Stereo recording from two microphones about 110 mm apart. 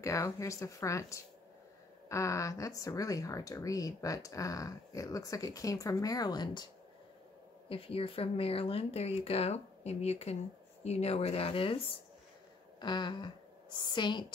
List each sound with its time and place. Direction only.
0.0 s speech: 30° left (ahead or behind)
7.7 s speech: 60° left (ahead or behind)
12.7 s speech: 45° left (ahead or behind)